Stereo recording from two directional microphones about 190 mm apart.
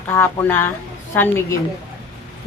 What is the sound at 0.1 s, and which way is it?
Speech, 15° left (ahead or behind).